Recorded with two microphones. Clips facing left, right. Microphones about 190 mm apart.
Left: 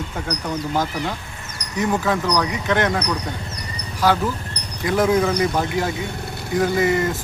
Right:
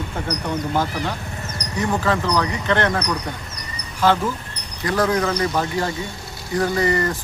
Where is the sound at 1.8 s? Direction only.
15° left (ahead or behind).